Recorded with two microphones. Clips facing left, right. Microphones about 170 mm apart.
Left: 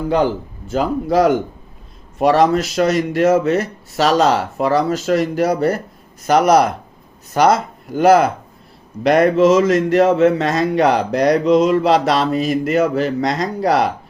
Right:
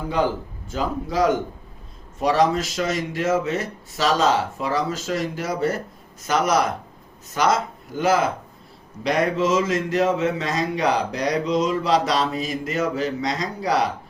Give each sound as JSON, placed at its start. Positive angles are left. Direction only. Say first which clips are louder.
{"t": 0.7, "sound": "speech", "louder": "left 8 dB", "side_deg": 65}